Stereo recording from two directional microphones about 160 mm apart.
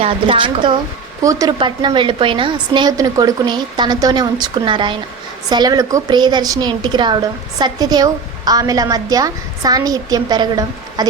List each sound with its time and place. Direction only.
0.0 s a woman's voice: 30° right (ahead or behind)
1.5 s a woman's voice: 30° right (ahead or behind)